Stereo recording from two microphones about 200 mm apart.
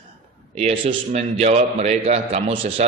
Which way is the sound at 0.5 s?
30° right (ahead or behind).